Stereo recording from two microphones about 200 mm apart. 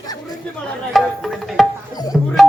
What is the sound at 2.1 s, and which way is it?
Music, centre (ahead or behind).